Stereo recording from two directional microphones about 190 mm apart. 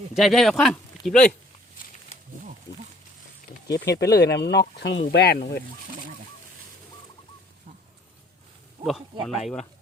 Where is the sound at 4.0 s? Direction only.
60° left (ahead or behind).